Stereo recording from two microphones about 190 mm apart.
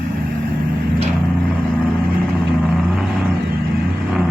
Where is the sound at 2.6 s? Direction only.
Centre (ahead or behind).